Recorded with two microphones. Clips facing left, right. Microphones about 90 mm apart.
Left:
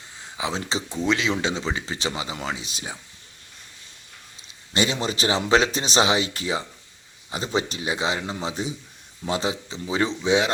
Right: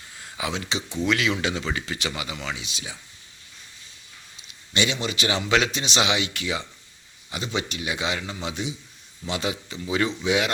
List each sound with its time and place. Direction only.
0.2 s a sound: 20° left (ahead or behind)
0.5 s speech: 35° left (ahead or behind)
2.4 s speech: 40° left (ahead or behind)
4.7 s speech: 35° left (ahead or behind)